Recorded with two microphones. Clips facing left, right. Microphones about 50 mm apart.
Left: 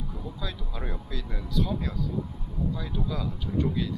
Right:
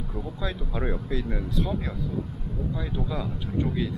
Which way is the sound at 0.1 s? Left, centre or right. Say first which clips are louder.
Right 5 dB; right.